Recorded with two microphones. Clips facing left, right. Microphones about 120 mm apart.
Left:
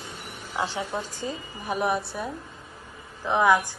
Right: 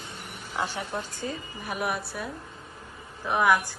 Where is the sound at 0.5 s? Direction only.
20° left (ahead or behind).